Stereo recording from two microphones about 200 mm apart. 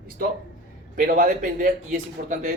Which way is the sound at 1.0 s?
45° right (ahead or behind).